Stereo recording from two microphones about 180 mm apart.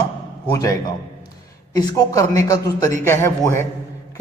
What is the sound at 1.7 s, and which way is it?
A man's voice, 20° left (ahead or behind).